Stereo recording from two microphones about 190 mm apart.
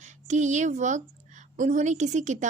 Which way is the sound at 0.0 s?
40° right (ahead or behind).